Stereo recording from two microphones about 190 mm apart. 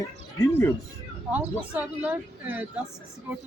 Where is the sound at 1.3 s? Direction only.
10° right (ahead or behind).